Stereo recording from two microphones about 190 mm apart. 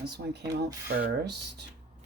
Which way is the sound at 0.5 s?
55° right (ahead or behind).